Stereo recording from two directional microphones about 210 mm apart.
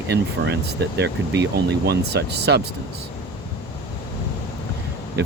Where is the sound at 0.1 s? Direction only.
55° right (ahead or behind).